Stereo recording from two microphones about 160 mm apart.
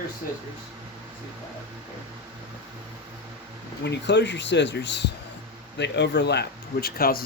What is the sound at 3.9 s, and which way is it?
Speech, 90° left.